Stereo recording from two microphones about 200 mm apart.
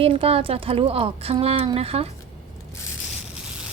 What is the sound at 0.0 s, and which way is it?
A woman's voice, 30° right (ahead or behind).